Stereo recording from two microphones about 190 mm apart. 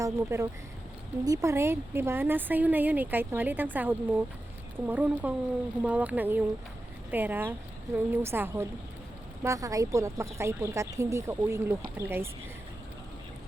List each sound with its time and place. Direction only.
0.0 s a woman's voice: 15° right (ahead or behind)